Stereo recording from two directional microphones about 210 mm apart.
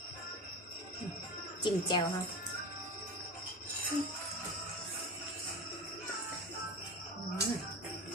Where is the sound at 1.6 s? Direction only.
20° left (ahead or behind).